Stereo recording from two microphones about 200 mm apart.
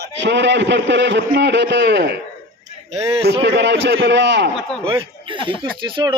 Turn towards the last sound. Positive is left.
turn(degrees=-25)  # may be behind; listen again after turning